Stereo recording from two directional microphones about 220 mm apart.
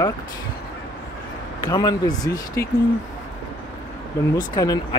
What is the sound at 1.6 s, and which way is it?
Speech, 15° left (ahead or behind).